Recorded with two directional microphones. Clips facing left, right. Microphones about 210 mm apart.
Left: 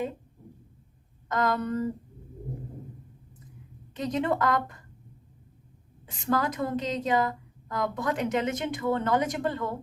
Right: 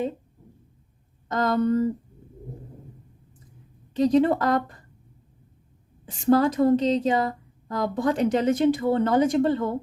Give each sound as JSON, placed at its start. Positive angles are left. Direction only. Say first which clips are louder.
{"t": 1.3, "sound": "speech", "louder": "right 5 dB", "side_deg": -30}
{"t": 3.9, "sound": "a woman's voice", "louder": "right 8 dB", "side_deg": -30}
{"t": 6.1, "sound": "a woman's voice", "louder": "right 8 dB", "side_deg": -30}